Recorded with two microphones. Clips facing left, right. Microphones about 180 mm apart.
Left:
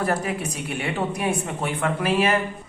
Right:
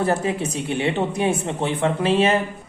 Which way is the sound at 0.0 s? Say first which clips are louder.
Right 3 dB; 25° right (ahead or behind).